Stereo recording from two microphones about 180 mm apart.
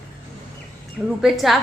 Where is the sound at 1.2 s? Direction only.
Centre (ahead or behind).